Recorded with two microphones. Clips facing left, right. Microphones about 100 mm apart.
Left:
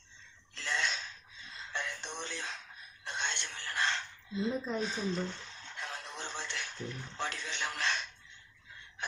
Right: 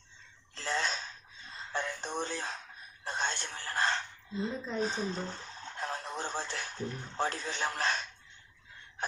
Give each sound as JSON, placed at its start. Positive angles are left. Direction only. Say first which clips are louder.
{"t": 0.5, "sound": "a sound", "louder": "right 2 dB", "side_deg": -35}
{"t": 4.8, "sound": "radio", "louder": "right 1 dB", "side_deg": -35}
{"t": 9.0, "sound": "gasp", "louder": "right 4 dB", "side_deg": -40}